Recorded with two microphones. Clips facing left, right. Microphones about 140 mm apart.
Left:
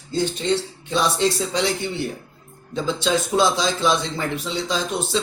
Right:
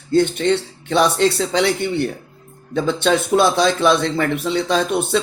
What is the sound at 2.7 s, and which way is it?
Speech, 65° right (ahead or behind).